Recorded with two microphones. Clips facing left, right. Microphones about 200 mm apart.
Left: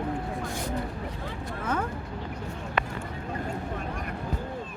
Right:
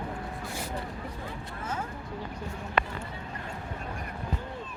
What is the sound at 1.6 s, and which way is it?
Speech, 60° left (ahead or behind).